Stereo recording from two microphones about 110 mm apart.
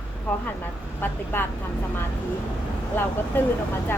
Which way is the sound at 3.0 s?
20° left (ahead or behind).